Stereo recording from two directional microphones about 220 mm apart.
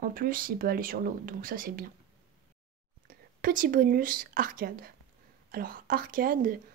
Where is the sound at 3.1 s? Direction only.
40° right (ahead or behind).